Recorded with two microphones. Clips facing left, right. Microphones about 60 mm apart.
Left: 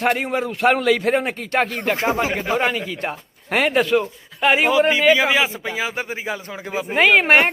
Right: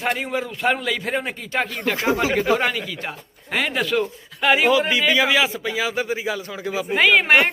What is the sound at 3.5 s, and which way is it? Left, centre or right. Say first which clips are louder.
Speech: left 5 dB; left.